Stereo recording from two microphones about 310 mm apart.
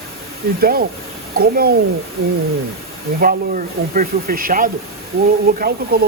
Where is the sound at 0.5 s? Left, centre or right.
Right.